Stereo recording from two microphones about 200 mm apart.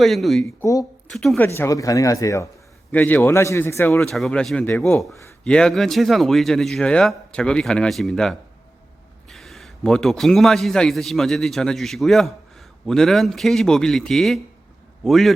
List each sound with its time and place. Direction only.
0.0 s a man's voice: centre (ahead or behind)
0.6 s speech: 15° left (ahead or behind)
1.1 s a man's voice: centre (ahead or behind)
1.5 s a man's voice: 15° left (ahead or behind)